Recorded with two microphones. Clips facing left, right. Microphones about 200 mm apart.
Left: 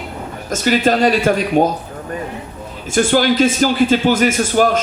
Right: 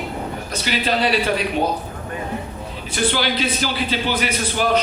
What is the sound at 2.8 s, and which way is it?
A man's voice, 45° left (ahead or behind).